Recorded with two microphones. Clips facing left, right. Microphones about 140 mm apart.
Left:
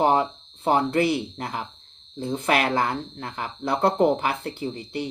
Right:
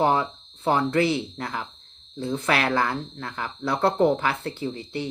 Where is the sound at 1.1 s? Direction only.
15° left (ahead or behind).